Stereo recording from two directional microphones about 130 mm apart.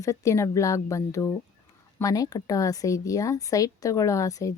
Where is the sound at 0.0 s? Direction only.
25° left (ahead or behind).